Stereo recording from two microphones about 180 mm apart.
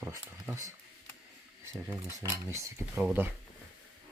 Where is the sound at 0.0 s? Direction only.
15° right (ahead or behind).